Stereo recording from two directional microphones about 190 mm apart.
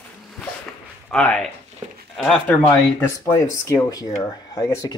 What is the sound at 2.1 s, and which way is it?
Speech, centre (ahead or behind).